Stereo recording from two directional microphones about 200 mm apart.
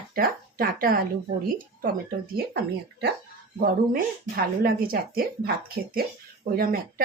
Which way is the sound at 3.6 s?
45° right (ahead or behind).